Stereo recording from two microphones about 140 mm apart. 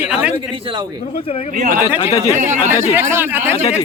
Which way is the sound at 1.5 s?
65° right (ahead or behind).